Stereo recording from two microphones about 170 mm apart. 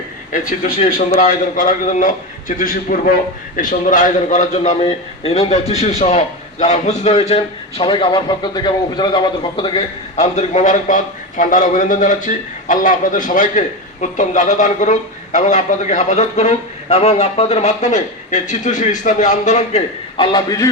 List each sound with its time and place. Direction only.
0.8 s a man's voice: 50° left (ahead or behind); by 9.8 s 30° left (ahead or behind)
10.2 s a man's voice: 45° left (ahead or behind)
20.1 s a man's voice: 30° left (ahead or behind)